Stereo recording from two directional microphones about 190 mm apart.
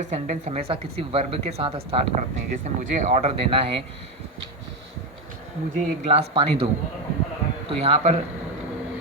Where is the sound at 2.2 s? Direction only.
40° right (ahead or behind).